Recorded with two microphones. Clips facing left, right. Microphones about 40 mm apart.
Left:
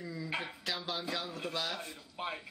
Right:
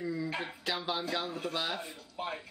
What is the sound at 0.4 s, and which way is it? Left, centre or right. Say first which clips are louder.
Speech: right 3 dB; centre.